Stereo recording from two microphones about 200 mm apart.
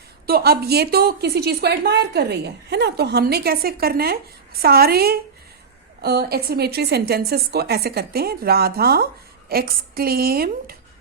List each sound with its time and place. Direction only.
0.3 s a woman's voice: 50° right (ahead or behind)